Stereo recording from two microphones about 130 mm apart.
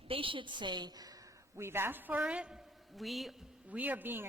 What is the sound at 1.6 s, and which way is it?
A woman's voice, 20° right (ahead or behind).